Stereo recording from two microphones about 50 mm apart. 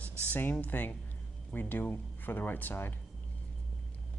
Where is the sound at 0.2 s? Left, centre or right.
Left.